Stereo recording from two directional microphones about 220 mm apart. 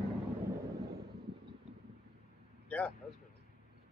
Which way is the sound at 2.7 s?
5° left (ahead or behind).